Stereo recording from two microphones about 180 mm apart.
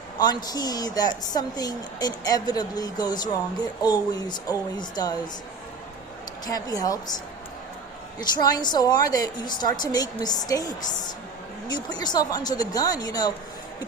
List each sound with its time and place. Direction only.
0.2 s a woman's voice: 25° left (ahead or behind)
6.4 s a woman's voice: 20° left (ahead or behind)
8.2 s a woman's voice: 20° left (ahead or behind)